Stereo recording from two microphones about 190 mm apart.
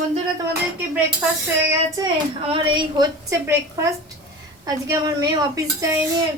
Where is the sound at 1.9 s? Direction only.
25° right (ahead or behind).